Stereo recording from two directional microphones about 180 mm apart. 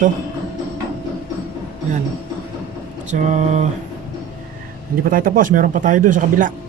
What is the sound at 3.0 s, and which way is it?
Mantra, 40° right (ahead or behind).